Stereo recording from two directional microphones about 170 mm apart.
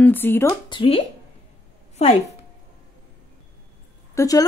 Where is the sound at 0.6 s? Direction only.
30° left (ahead or behind).